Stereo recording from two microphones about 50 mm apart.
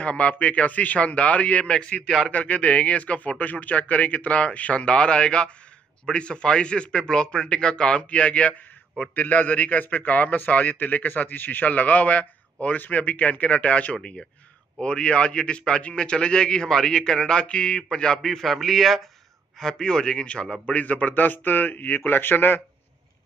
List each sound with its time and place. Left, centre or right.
0.0 s speech: left
2.0 s a man's voice: centre
2.3 s a man's voice: left; by 19.0 s centre
19.6 s a man's voice: centre
20.6 s speech: left